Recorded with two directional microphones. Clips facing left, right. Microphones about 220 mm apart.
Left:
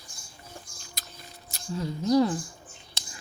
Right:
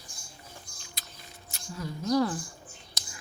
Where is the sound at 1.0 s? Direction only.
45° left (ahead or behind).